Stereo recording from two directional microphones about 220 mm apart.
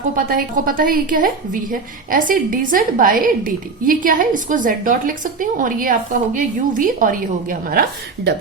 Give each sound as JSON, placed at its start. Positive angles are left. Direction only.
{"t": 0.3, "sound": "a woman's voice", "side_deg": -40}